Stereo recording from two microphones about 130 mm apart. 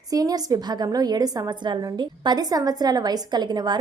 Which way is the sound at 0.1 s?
30° right (ahead or behind).